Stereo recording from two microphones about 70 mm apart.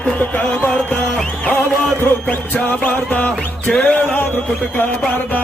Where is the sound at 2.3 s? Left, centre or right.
Left.